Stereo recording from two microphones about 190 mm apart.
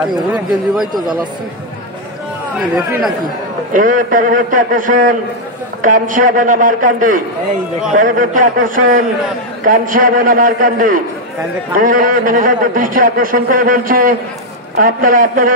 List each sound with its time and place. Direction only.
3.7 s a man's voice: 45° right (ahead or behind)